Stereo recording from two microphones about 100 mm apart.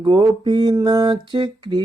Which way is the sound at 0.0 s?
50° right (ahead or behind).